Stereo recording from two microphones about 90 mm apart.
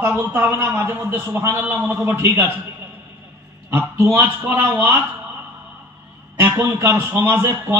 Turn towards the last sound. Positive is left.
turn(degrees=-25)  # may be behind; listen again after turning